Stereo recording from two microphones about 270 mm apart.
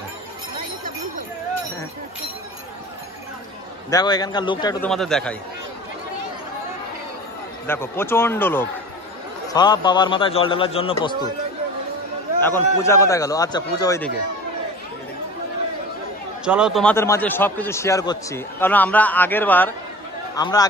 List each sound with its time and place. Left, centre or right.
3.9 s a man's voice: centre
4.8 s a man's voice: centre
7.6 s a man's voice: centre
12.4 s a man's voice: centre
16.4 s a man's voice: centre